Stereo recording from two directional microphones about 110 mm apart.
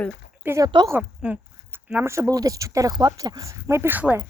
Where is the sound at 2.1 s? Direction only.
30° right (ahead or behind).